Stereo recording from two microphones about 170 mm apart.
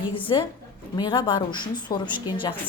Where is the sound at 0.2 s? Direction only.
30° left (ahead or behind).